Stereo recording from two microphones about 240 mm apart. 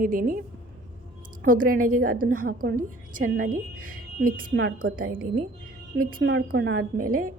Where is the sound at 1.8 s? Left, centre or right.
Right.